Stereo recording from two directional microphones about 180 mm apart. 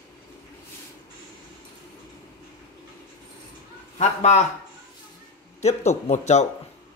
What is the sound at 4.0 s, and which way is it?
Speech, 40° left (ahead or behind).